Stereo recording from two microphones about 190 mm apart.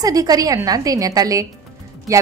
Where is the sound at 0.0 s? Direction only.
20° right (ahead or behind).